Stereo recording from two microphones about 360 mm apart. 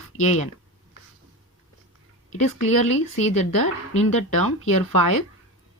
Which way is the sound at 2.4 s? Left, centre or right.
Left.